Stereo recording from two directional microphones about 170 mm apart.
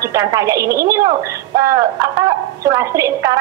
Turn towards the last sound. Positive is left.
turn(degrees=-20)  # may be behind; listen again after turning